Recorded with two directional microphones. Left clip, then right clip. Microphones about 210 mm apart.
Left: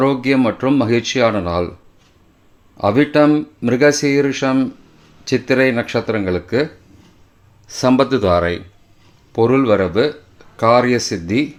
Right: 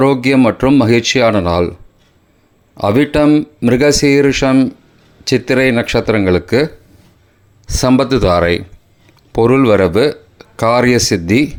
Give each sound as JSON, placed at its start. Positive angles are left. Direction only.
{"t": 0.0, "sound": "speech", "side_deg": -25}
{"t": 2.7, "sound": "speech", "side_deg": -25}
{"t": 7.7, "sound": "speech", "side_deg": -25}